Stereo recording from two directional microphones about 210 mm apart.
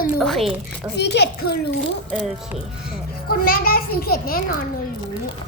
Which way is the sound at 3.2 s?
45° left (ahead or behind).